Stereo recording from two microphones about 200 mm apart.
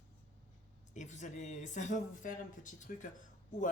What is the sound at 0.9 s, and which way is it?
Speech, 35° left (ahead or behind).